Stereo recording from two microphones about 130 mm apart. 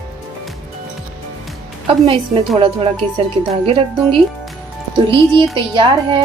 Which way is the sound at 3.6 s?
40° right (ahead or behind).